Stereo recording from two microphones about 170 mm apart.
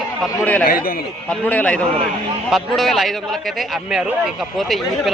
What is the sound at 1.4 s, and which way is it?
A man's voice, 10° left (ahead or behind).